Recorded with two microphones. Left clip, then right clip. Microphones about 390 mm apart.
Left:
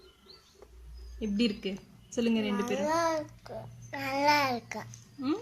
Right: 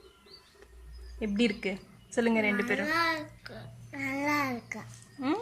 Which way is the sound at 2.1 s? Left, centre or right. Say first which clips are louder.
Right 3 dB; centre.